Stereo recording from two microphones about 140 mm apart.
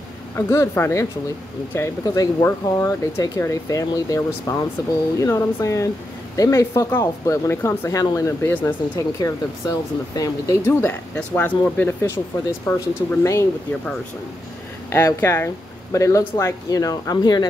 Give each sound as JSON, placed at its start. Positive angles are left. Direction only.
{"t": 0.4, "sound": "speech", "side_deg": 20}
{"t": 14.9, "sound": "speech", "side_deg": 15}